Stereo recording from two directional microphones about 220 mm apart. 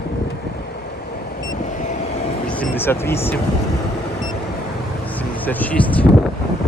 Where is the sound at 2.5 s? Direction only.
10° left (ahead or behind).